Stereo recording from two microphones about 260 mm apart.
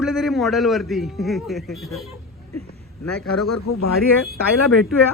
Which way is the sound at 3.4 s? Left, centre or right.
Left.